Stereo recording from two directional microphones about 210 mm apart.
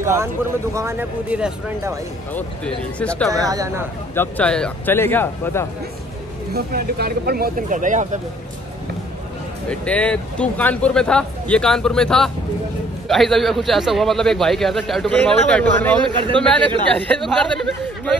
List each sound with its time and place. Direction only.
0.0 s speech: 10° right (ahead or behind)
2.3 s a man's voice: 5° left (ahead or behind)
3.3 s speech: 15° right (ahead or behind)
4.1 s speech: 10° left (ahead or behind)
6.5 s speech: 45° right (ahead or behind)
9.7 s a man's voice: 5° left (ahead or behind)